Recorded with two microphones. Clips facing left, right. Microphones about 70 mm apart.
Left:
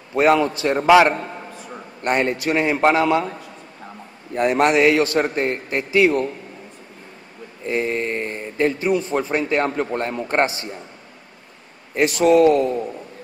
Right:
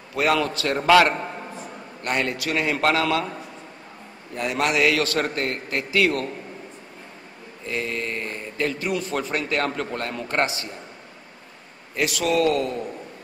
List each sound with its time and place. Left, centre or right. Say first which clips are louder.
0.1 s a man's voice: left 6 dB; left
2.0 s a man's voice: left 5 dB; left
4.4 s a man's voice: left 6 dB; left
7.6 s a man's voice: left 6 dB; left
11.9 s a man's voice: left 8 dB; left